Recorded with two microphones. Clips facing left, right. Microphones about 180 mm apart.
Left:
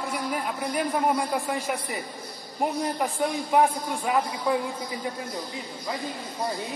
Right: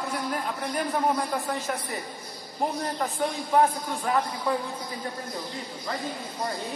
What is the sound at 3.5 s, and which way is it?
A man's voice, 10° left (ahead or behind).